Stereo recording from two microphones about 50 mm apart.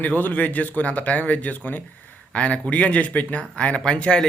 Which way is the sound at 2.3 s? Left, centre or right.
Left.